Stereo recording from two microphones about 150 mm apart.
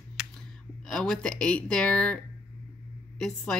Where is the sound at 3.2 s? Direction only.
5° left (ahead or behind).